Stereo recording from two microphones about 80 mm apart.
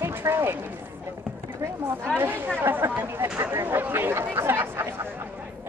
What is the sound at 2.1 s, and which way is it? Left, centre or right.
Speech, centre.